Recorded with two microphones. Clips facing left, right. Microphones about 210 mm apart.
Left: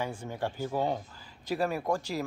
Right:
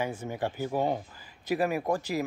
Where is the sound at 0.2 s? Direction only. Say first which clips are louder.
Right 2 dB; 10° right (ahead or behind).